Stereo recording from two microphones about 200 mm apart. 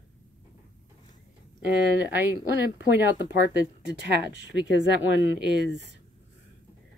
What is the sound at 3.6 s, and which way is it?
Speech, 60° right (ahead or behind).